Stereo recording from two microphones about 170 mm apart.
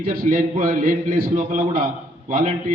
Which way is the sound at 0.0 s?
60° right (ahead or behind).